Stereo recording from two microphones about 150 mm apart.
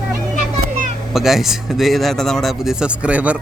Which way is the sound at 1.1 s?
Centre (ahead or behind).